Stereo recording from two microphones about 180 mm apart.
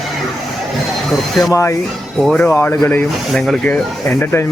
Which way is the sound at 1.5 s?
15° left (ahead or behind).